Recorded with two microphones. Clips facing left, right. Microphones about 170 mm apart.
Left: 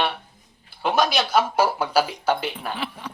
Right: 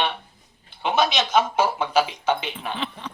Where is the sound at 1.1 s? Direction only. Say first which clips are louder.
Even; 10° left (ahead or behind).